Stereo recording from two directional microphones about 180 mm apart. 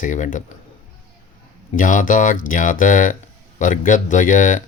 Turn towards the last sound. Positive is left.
turn(degrees=45)  # may be behind; listen again after turning